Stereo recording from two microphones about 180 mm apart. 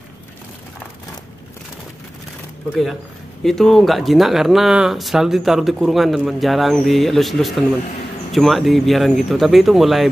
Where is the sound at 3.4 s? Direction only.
Centre (ahead or behind).